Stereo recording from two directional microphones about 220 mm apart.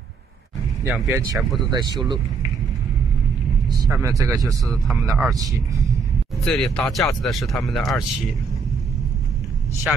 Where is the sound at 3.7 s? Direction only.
15° right (ahead or behind).